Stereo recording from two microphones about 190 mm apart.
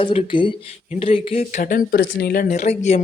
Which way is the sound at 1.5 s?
45° left (ahead or behind).